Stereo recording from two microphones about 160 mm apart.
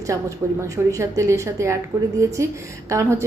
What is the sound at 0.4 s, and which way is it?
A woman's voice, 15° right (ahead or behind).